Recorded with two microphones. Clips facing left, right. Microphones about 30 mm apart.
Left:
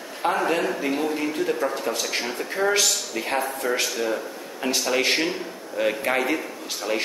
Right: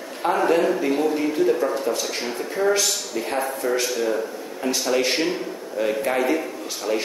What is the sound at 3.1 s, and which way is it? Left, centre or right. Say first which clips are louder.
Speech: right 1 dB; left.